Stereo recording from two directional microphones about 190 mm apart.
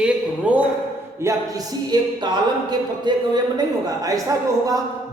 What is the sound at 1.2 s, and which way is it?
Speech, 15° right (ahead or behind).